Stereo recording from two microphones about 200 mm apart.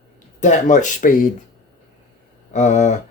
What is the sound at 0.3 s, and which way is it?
Speech, 40° left (ahead or behind).